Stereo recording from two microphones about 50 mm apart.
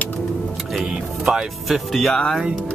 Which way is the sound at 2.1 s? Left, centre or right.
Centre.